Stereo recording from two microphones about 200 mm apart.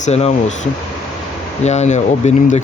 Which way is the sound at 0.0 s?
30° left (ahead or behind).